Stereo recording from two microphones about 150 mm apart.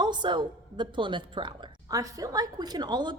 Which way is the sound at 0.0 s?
30° right (ahead or behind).